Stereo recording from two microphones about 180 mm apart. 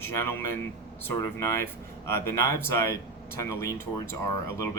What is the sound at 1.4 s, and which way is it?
Speech, 15° left (ahead or behind).